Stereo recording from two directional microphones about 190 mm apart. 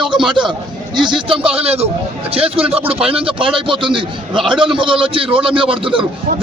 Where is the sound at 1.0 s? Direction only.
25° right (ahead or behind).